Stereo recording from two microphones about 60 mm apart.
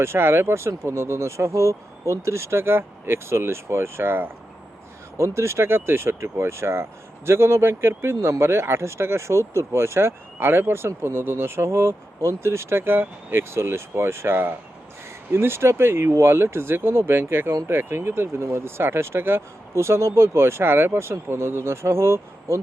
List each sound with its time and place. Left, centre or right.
0.0 s speech: right
5.1 s speech: right